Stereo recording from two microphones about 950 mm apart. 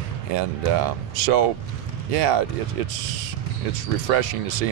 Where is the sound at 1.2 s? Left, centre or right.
Right.